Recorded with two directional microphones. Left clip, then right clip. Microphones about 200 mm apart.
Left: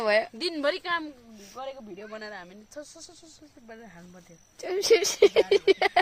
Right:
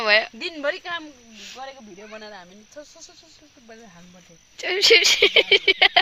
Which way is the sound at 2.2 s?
10° left (ahead or behind).